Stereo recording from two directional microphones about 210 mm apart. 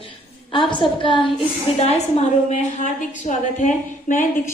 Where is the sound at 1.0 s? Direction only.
25° left (ahead or behind).